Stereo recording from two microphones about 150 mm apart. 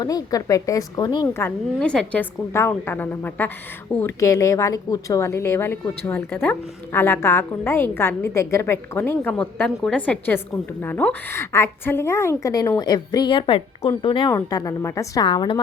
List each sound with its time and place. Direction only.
0.0 s a woman's voice: 25° left (ahead or behind)
1.3 s a woman's voice: 15° left (ahead or behind); by 15.6 s 35° left (ahead or behind)